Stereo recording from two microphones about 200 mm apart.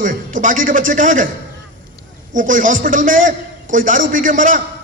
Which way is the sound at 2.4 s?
40° right (ahead or behind).